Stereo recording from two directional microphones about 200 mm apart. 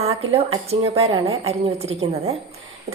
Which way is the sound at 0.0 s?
30° right (ahead or behind).